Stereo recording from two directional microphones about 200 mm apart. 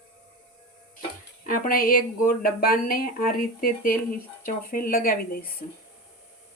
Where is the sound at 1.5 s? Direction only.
45° left (ahead or behind).